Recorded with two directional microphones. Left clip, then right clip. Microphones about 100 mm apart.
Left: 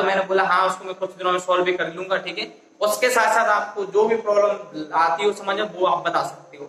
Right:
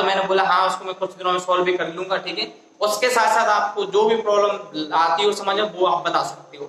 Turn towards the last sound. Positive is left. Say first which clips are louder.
# right 1 dB
turn(degrees=-25)  # may be behind; listen again after turning